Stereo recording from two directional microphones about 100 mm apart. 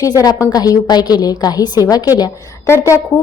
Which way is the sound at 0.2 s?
40° left (ahead or behind).